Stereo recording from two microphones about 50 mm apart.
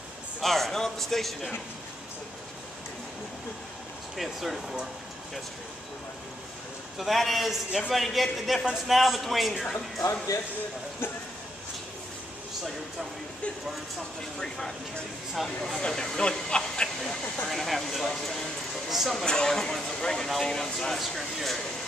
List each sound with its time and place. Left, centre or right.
0.4 s a man's voice: centre
4.2 s a man's voice: centre
7.0 s a man's voice: centre
15.3 s a man's voice: centre
17.5 s a man's voice: centre
19.1 s speech: centre
21.0 s a man's voice: centre